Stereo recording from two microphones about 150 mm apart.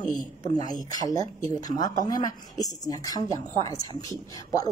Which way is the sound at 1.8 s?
25° left (ahead or behind).